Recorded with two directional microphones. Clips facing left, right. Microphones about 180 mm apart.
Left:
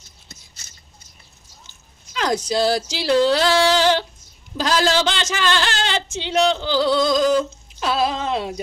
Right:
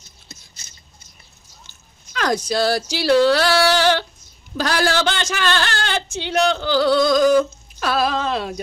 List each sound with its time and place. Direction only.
2.1 s speech: 20° left (ahead or behind)
5.0 s speech: 15° left (ahead or behind)